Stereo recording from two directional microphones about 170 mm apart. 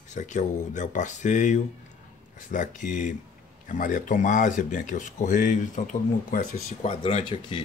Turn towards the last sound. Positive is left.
turn(degrees=35)  # may be behind; listen again after turning